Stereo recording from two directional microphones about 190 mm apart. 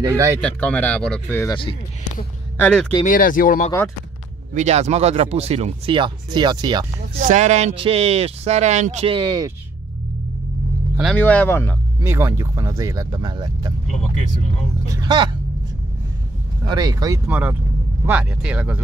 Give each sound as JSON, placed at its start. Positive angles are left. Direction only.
{"t": 0.0, "sound": "speech", "side_deg": -15}
{"t": 0.4, "sound": "speech", "side_deg": 5}
{"t": 3.1, "sound": "speech", "side_deg": 45}
{"t": 4.6, "sound": "speech", "side_deg": -35}
{"t": 7.2, "sound": "speech", "side_deg": -40}
{"t": 11.1, "sound": "speech", "side_deg": 10}
{"t": 12.0, "sound": "speech", "side_deg": -10}
{"t": 13.8, "sound": "speech", "side_deg": 40}
{"t": 15.0, "sound": "speech", "side_deg": -25}
{"t": 16.6, "sound": "speech", "side_deg": -20}
{"t": 17.3, "sound": "speech", "side_deg": -10}